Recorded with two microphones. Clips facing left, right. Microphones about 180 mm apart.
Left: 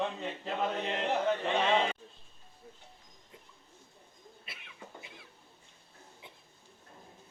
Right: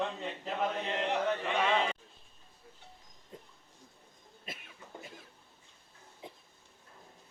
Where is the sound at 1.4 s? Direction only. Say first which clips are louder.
Left 2 dB; 25° left (ahead or behind).